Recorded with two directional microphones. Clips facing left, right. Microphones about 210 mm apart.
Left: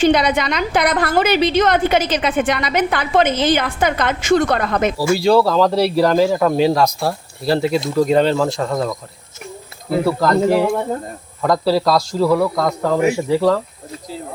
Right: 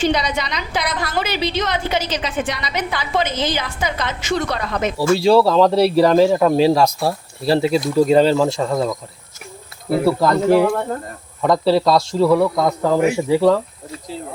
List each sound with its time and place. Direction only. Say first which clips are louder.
0.0 s a woman's voice: left 5 dB; 55° left (ahead or behind)
4.9 s speech: right 2 dB; 5° left (ahead or behind)
10.1 s speech: right 1 dB; 5° right (ahead or behind)